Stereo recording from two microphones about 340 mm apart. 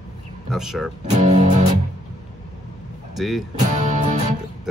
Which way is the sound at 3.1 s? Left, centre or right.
Centre.